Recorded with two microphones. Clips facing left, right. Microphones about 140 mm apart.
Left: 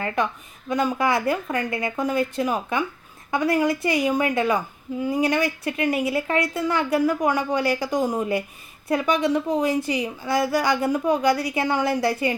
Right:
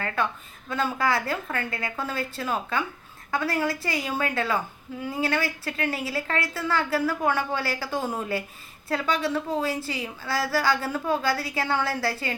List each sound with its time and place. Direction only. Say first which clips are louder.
0.7 s speech: left 4 dB; 15° left (ahead or behind)